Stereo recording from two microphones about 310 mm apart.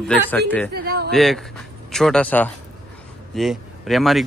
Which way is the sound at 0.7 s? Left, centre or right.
Right.